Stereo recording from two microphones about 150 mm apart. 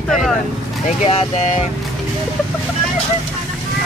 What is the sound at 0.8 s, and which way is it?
Speech, 50° left (ahead or behind).